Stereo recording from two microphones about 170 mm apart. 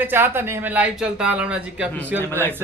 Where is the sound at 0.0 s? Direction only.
10° right (ahead or behind).